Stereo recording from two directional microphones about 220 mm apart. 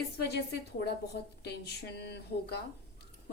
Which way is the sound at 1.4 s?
50° left (ahead or behind).